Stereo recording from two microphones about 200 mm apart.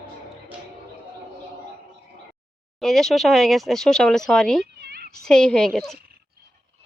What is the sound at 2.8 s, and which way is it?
Speech, centre (ahead or behind).